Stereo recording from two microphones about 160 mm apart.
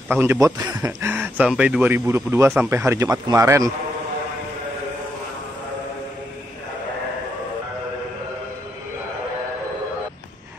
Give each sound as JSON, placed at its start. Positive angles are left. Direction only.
{"t": 0.1, "sound": "a man's voice", "side_deg": -15}